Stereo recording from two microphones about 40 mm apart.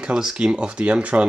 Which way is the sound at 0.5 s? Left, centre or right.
Right.